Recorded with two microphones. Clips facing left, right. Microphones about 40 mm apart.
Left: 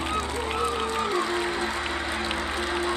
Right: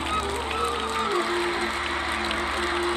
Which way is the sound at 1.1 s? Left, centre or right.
Right.